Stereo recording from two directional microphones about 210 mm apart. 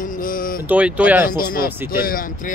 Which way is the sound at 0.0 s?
40° left (ahead or behind).